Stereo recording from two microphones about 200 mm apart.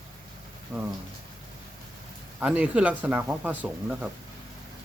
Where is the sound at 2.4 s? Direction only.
5° right (ahead or behind).